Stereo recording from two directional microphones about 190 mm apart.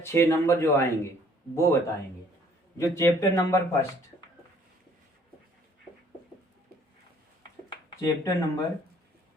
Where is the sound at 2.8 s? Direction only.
15° left (ahead or behind).